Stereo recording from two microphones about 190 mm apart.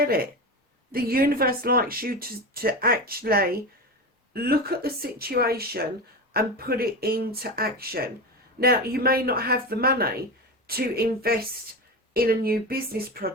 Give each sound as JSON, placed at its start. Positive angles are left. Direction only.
{"t": 0.0, "sound": "speech", "side_deg": -50}